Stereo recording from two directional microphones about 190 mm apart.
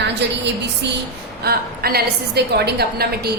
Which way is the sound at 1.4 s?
55° right (ahead or behind).